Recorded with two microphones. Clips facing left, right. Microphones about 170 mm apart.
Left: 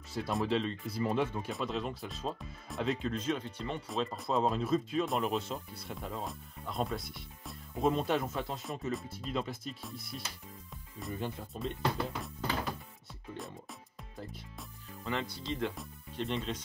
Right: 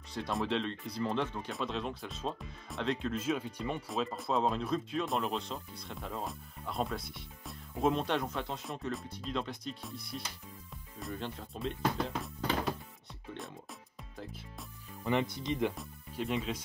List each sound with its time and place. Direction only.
0.1 s speech: centre (ahead or behind)
3.9 s speech: centre (ahead or behind)
14.1 s speech: centre (ahead or behind)
15.0 s speech: 20° right (ahead or behind)
15.7 s speech: centre (ahead or behind)